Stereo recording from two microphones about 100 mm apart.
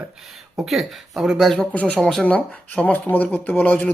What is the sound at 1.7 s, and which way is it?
A man's voice, 10° left (ahead or behind).